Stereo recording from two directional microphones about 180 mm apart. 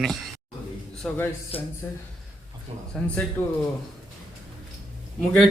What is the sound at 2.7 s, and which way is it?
Speech, 35° right (ahead or behind).